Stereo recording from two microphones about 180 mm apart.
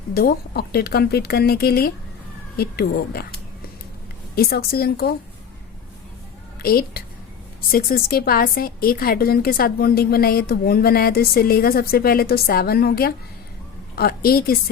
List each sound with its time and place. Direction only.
0.1 s a woman's voice: 60° left (ahead or behind)
4.4 s a woman's voice: 60° left (ahead or behind)
6.6 s a woman's voice: 55° left (ahead or behind)